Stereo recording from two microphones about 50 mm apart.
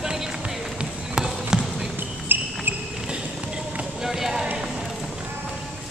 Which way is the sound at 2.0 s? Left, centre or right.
Right.